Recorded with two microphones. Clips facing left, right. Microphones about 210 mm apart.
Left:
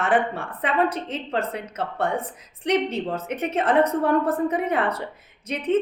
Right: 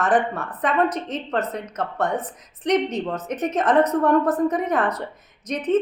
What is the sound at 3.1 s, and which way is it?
Speech, 30° left (ahead or behind).